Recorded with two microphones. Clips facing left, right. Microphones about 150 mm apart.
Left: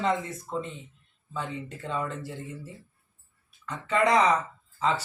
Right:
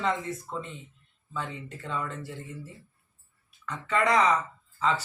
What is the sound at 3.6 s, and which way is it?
Speech, 25° left (ahead or behind).